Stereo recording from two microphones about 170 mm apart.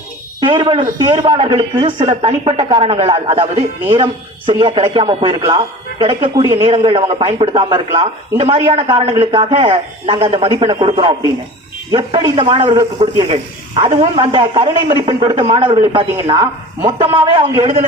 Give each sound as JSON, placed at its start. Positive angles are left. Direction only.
{"t": 0.3, "sound": "a man's voice", "side_deg": -30}
{"t": 13.2, "sound": "a man's voice", "side_deg": -35}